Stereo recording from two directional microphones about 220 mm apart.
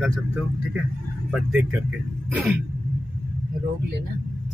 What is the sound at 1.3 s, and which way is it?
Speech, 5° right (ahead or behind).